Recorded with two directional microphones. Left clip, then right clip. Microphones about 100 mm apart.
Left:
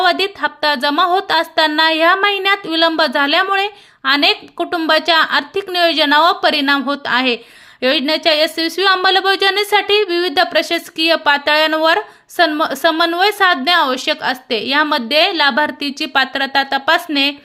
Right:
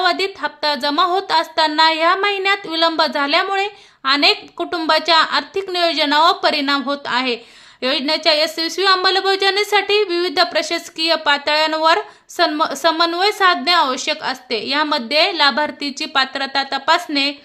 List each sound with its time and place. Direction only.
0.0 s a woman's voice: 35° left (ahead or behind)